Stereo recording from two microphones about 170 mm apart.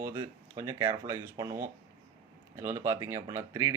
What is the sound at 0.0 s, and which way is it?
Speech, 15° right (ahead or behind).